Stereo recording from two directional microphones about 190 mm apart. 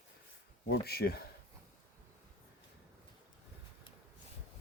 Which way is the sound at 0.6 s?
60° left (ahead or behind).